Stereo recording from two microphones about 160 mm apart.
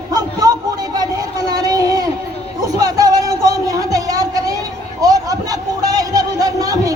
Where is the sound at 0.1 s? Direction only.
25° right (ahead or behind).